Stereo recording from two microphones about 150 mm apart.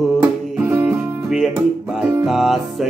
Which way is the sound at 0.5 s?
10° right (ahead or behind).